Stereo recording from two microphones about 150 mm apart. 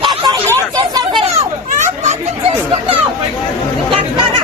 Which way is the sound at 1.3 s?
50° right (ahead or behind).